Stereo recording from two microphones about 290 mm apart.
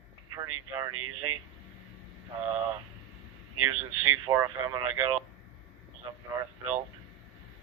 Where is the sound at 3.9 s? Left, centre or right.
Right.